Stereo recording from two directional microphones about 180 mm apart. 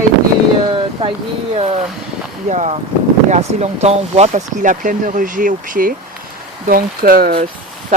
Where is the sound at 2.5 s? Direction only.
40° right (ahead or behind).